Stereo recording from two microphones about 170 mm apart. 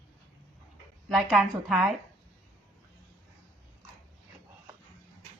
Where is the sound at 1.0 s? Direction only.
Centre (ahead or behind).